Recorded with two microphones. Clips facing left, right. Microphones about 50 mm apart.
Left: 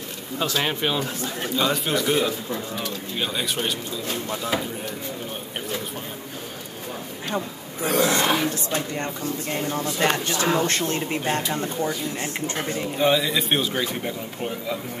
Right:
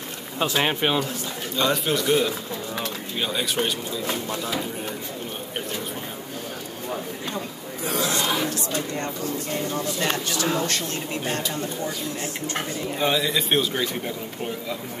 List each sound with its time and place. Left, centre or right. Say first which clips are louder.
0.5 s speech: right 2 dB; centre
1.6 s a man's voice: right 1 dB; centre
7.3 s a man's voice: left 3 dB; left
13.0 s a man's voice: left 2 dB; centre